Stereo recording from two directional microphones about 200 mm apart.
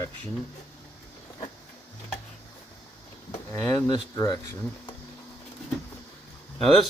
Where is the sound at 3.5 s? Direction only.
5° left (ahead or behind).